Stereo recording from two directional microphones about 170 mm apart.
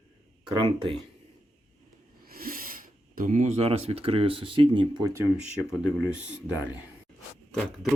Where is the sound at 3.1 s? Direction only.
45° right (ahead or behind); by 5.3 s 20° right (ahead or behind).